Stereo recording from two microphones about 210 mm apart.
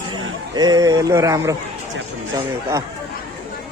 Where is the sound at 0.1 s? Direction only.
20° right (ahead or behind).